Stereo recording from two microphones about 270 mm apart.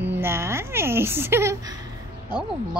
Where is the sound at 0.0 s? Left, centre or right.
Centre.